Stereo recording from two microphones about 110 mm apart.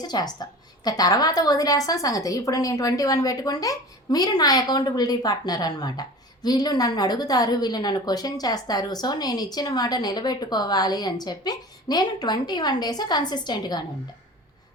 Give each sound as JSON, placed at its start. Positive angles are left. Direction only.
{"t": 0.0, "sound": "a woman's voice", "side_deg": 40}